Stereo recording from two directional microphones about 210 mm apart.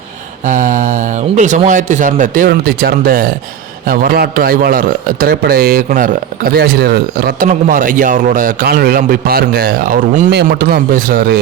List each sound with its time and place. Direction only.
0.4 s a man's voice: 40° right (ahead or behind)